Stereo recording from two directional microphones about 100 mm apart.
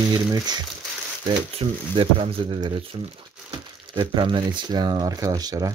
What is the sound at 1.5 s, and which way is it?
Speech, 70° right (ahead or behind).